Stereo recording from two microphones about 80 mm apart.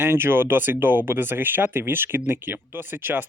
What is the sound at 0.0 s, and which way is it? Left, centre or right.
Speech, right.